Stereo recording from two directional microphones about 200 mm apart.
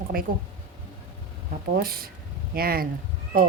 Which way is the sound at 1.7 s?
50° right (ahead or behind).